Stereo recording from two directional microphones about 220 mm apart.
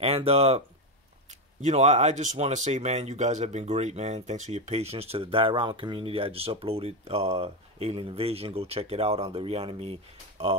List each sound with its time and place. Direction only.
0.0 s speech: 25° right (ahead or behind)
1.6 s speech: 30° right (ahead or behind)